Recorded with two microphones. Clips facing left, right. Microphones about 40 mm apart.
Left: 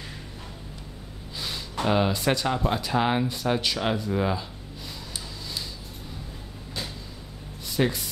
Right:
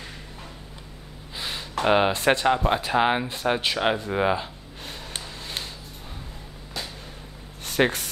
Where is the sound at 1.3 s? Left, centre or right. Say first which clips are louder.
Right 3 dB; right.